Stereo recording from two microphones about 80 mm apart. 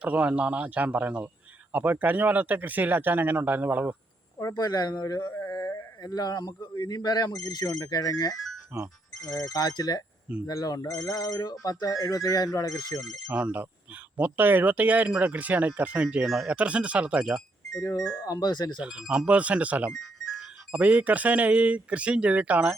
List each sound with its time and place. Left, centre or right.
0.0 s speech: centre
4.5 s speech: left
5.1 s mantra: left
6.0 s speech: left
8.7 s speech: right
9.3 s speech: left
13.3 s speech: centre
16.2 s speech: centre
16.5 s speech: centre
17.7 s speech: left
18.3 s speech: left
18.8 s speech: centre
19.9 s music: centre
20.7 s speech: centre